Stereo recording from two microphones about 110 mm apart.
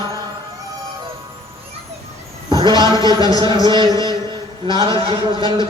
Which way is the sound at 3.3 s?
40° right (ahead or behind).